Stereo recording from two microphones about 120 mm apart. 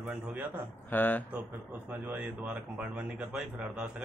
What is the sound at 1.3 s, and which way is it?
A man's voice, 15° right (ahead or behind).